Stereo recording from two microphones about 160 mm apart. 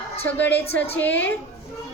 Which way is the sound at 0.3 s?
10° left (ahead or behind).